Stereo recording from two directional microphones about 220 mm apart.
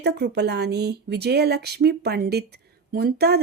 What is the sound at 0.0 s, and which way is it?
A woman's voice, 50° right (ahead or behind).